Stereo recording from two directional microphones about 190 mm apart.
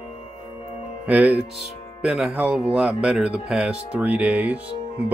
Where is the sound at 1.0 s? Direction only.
5° right (ahead or behind).